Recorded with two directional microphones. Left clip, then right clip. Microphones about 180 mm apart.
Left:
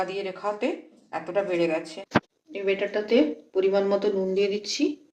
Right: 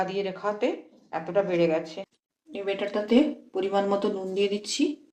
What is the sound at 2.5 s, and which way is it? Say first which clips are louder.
Speech: left 3 dB; 60° right (ahead or behind).